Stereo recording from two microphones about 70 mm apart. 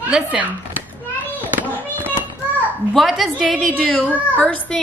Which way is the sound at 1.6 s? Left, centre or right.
Right.